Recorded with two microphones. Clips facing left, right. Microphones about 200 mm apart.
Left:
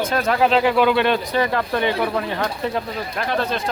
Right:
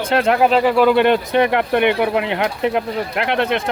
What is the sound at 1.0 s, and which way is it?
Speech, 60° right (ahead or behind).